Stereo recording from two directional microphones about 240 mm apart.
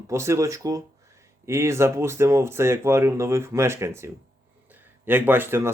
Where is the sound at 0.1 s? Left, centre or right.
Centre.